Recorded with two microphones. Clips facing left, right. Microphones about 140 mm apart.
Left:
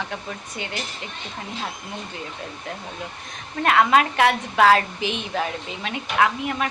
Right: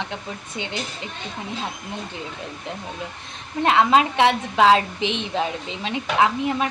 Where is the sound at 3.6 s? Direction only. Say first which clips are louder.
Right 1 dB; 20° right (ahead or behind).